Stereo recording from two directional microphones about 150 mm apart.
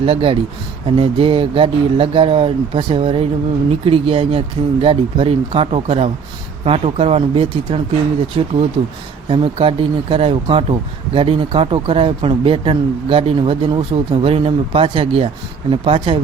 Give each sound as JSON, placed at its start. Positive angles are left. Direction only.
{"t": 0.0, "sound": "speech", "side_deg": -40}